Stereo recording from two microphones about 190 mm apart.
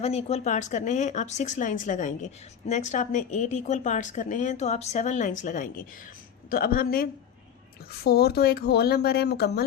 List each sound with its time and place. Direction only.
0.0 s a woman's voice: 35° left (ahead or behind); by 9.6 s 60° left (ahead or behind)